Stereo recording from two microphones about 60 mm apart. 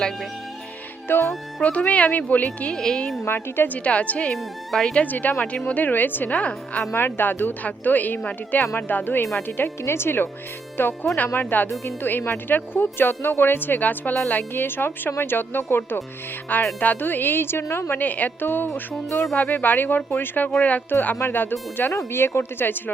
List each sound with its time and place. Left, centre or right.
1.0 s music: left
1.6 s speech: left
2.7 s speech: centre
3.2 s speech: left
3.7 s speech: left
4.4 s speech: centre
5.0 s speech: left
6.9 s speech: left
9.6 s speech: left
17.9 s speech: left
20.5 s speech: left
21.0 s speech: left
21.9 s speech: left